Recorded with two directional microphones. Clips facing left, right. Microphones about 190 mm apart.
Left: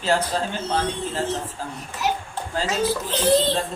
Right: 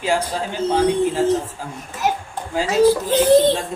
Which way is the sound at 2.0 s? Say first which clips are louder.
Right 3 dB; 45° right (ahead or behind).